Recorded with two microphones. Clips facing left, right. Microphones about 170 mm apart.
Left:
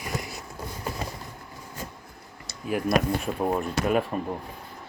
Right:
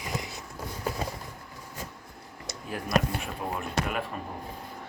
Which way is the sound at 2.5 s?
20° right (ahead or behind).